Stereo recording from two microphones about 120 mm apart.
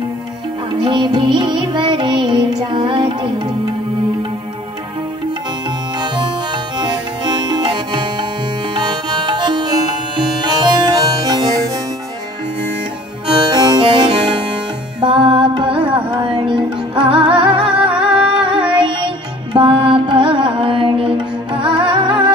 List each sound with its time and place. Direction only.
0.7 s music: 40° right (ahead or behind)
6.8 s music: 40° right (ahead or behind)
13.3 s music: 35° right (ahead or behind)